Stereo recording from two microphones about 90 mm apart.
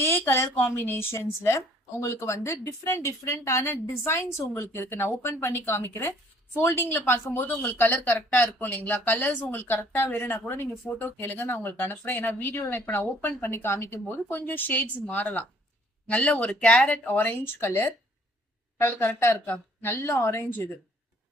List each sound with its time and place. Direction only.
0.0 s speech: 25° left (ahead or behind)